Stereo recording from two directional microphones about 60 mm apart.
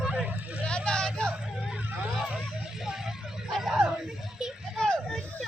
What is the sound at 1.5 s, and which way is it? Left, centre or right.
Vehicle, centre.